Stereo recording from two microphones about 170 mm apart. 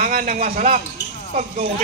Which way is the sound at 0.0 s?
50° right (ahead or behind).